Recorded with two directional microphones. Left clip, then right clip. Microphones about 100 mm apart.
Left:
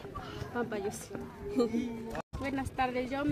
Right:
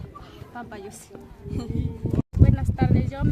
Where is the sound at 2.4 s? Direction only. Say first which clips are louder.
Right 2 dB; 35° right (ahead or behind).